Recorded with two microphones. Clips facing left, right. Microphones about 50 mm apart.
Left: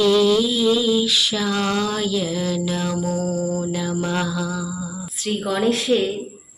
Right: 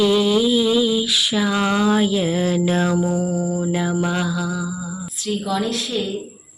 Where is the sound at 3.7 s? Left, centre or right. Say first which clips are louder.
Right 3 dB; right.